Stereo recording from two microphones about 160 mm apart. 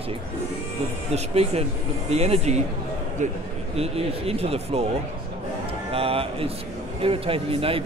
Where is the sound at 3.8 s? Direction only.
40° right (ahead or behind).